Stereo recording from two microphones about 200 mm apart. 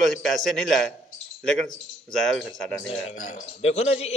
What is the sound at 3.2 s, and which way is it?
Speech, 30° left (ahead or behind).